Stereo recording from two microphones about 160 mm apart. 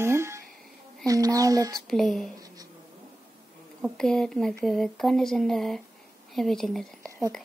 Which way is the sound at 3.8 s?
5° left (ahead or behind).